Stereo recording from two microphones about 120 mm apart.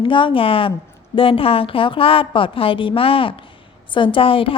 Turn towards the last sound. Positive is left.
turn(degrees=50)  # may be behind; listen again after turning